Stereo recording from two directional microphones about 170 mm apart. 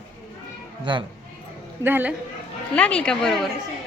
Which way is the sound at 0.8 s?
30° right (ahead or behind).